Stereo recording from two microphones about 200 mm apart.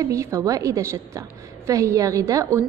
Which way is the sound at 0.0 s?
15° right (ahead or behind).